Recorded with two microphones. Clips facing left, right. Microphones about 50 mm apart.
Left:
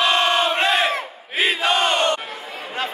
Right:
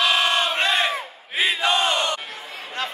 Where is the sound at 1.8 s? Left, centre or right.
Left.